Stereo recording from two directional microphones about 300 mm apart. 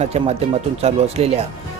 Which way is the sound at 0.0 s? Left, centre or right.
Right.